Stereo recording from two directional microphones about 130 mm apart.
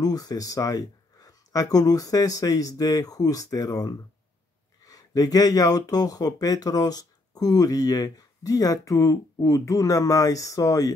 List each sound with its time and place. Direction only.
0.0 s speech: 30° left (ahead or behind)